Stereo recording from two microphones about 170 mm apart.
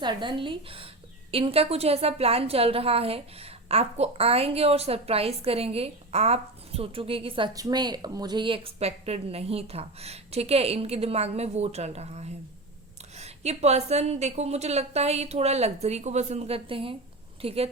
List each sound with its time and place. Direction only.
0.0 s a woman's voice: 25° right (ahead or behind)